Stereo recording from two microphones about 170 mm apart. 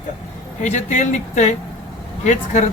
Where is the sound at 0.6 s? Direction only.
45° left (ahead or behind).